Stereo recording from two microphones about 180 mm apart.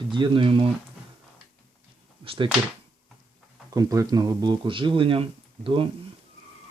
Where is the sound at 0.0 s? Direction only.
25° right (ahead or behind).